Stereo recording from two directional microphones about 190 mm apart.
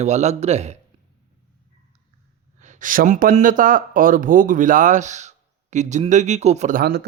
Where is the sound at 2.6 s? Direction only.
40° right (ahead or behind).